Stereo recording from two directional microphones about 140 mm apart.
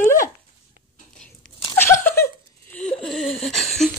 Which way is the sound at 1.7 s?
15° left (ahead or behind).